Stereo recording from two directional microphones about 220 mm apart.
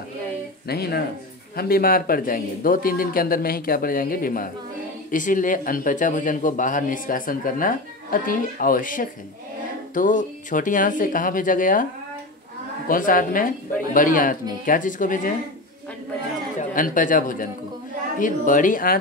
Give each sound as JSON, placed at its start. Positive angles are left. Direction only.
{"t": 0.7, "sound": "speech", "side_deg": 45}
{"t": 16.5, "sound": "speech", "side_deg": 35}